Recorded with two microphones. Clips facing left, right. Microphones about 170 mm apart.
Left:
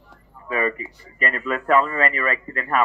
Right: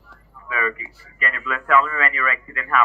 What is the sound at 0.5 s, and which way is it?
Speech, 40° left (ahead or behind).